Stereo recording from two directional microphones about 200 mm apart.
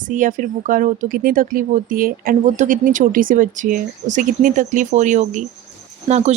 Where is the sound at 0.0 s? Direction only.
40° right (ahead or behind).